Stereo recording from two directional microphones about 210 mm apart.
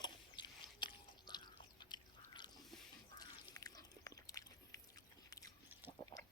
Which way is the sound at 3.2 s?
15° left (ahead or behind).